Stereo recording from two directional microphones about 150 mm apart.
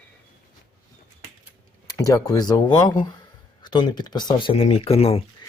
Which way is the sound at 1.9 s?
20° left (ahead or behind).